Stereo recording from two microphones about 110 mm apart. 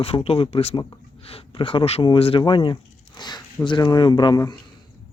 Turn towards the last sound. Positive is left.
turn(degrees=45)  # may be behind; listen again after turning